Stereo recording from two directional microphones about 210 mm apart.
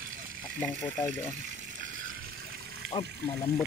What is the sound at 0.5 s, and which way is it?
Speech, 10° left (ahead or behind).